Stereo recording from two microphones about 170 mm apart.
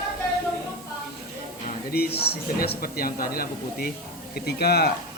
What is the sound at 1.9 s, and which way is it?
Speech, 65° left (ahead or behind).